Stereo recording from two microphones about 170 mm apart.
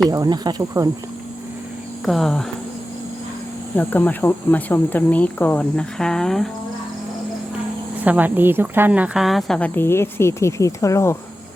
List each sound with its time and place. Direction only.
0.1 s speech: 20° right (ahead or behind)
2.0 s speech: centre (ahead or behind)
3.8 s a woman's voice: 10° left (ahead or behind)
8.0 s a woman's voice: 10° right (ahead or behind); by 11.2 s 15° left (ahead or behind)